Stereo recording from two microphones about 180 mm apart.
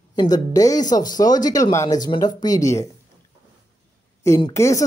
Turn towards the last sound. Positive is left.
turn(degrees=15)  # may be behind; listen again after turning